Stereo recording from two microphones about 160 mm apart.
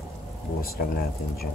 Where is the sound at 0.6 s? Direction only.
70° left (ahead or behind).